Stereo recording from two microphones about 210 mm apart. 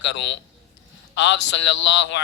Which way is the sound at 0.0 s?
60° left (ahead or behind).